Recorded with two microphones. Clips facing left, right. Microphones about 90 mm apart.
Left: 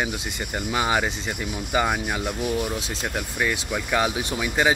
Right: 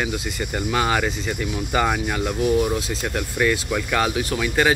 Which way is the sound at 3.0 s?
5° left (ahead or behind).